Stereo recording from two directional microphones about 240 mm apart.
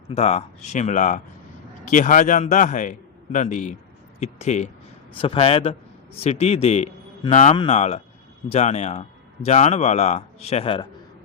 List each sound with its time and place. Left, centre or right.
0.1 s a man's voice: left